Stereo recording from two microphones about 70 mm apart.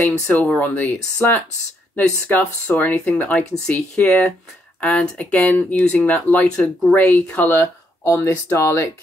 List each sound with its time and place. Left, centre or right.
0.0 s speech: left
2.0 s speech: left
7.4 s a sound: left
8.5 s speech: left